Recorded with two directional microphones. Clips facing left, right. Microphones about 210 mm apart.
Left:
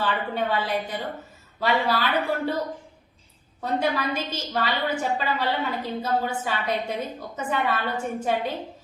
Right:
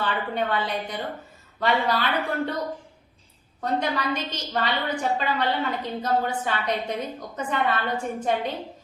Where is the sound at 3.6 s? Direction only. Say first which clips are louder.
Left 1 dB; 5° left (ahead or behind).